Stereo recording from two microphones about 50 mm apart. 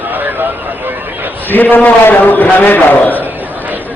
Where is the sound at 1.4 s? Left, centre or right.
Left.